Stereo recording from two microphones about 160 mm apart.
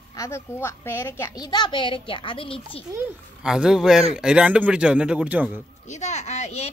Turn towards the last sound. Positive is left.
turn(degrees=45)  # may be behind; listen again after turning